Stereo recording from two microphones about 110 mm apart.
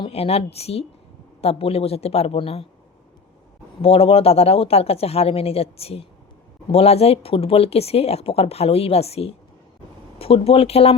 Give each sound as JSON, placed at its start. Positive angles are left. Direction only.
{"t": 0.1, "sound": "a woman's voice", "side_deg": 65}
{"t": 3.8, "sound": "speech", "side_deg": 60}